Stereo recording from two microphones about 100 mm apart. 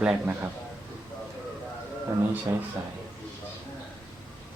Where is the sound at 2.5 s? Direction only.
25° right (ahead or behind).